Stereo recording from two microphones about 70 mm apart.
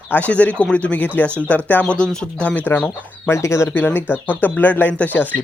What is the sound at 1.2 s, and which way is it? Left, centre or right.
Speech, right.